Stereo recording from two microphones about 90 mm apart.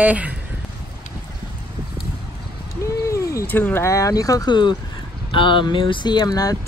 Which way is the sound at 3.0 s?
35° left (ahead or behind).